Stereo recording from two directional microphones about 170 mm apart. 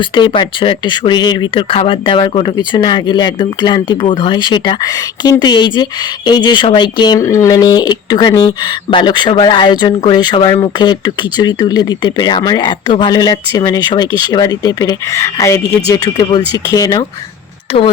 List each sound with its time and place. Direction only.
0.0 s speech: 30° left (ahead or behind)